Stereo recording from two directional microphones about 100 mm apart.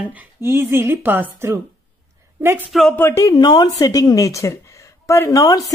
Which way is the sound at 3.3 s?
45° left (ahead or behind).